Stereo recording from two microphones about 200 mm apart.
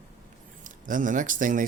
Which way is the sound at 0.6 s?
40° right (ahead or behind).